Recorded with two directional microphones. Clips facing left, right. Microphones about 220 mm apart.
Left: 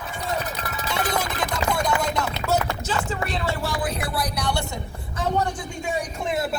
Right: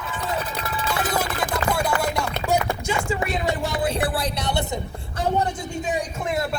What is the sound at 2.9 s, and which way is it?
A man's voice, 10° right (ahead or behind).